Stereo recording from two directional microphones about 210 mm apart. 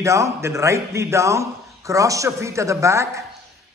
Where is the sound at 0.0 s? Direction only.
15° right (ahead or behind).